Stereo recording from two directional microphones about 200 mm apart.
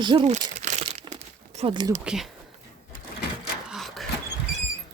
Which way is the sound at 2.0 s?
5° right (ahead or behind).